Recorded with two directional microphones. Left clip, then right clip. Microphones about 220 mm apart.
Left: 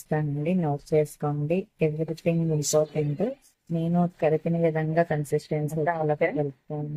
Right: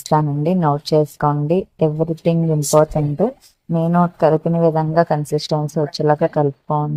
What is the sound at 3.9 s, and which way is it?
A woman's voice, 20° right (ahead or behind).